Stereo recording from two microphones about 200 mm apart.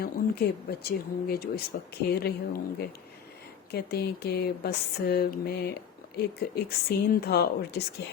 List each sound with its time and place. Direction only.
0.0 s speech: 50° left (ahead or behind)
3.7 s speech: 50° left (ahead or behind)